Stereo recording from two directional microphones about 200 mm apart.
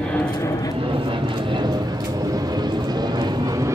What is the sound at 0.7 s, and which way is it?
Vehicle, 25° right (ahead or behind).